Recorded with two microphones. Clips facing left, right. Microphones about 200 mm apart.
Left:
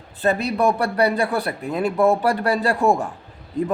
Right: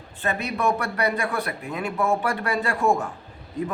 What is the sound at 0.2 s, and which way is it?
A man's voice, 35° left (ahead or behind).